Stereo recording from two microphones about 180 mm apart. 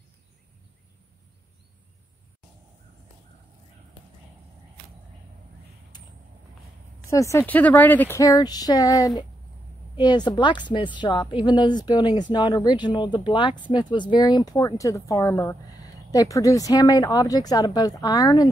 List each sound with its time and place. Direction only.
7.1 s speech: 15° left (ahead or behind)